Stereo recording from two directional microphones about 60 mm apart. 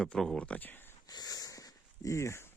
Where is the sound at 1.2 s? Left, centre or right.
Left.